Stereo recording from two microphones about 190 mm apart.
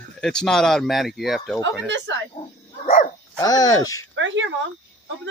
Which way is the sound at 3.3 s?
20° left (ahead or behind).